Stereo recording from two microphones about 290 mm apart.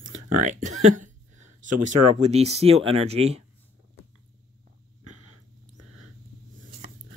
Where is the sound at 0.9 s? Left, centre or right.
Right.